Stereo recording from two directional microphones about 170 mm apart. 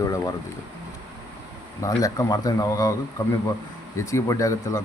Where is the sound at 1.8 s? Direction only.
20° left (ahead or behind).